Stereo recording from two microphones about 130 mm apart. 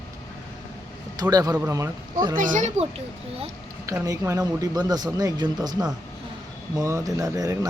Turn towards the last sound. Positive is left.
turn(degrees=-25)  # may be behind; listen again after turning